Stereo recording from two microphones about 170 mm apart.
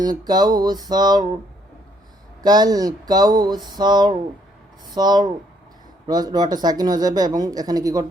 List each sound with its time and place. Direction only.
0.0 s speech: 25° right (ahead or behind)
2.4 s speech: 25° right (ahead or behind)